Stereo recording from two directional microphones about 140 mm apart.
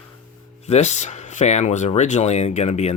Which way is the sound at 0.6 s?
50° left (ahead or behind).